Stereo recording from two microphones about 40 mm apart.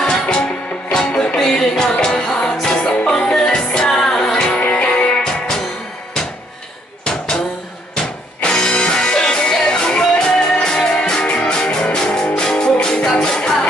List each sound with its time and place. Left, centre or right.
0.0 s music: centre
4.4 s music: left
7.1 s a sound: left
7.9 s music: left